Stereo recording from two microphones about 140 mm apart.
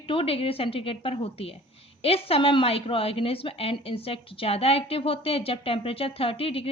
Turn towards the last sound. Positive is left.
turn(degrees=40)  # may be behind; listen again after turning